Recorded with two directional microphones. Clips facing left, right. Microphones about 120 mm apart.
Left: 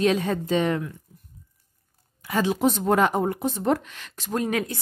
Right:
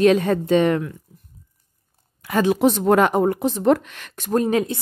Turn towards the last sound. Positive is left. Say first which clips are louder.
# right 6 dB
turn(degrees=-30)  # may be behind; listen again after turning